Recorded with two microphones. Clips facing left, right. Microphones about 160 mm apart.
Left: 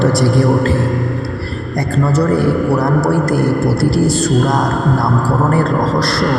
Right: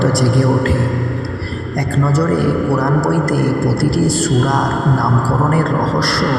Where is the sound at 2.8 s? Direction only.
20° left (ahead or behind).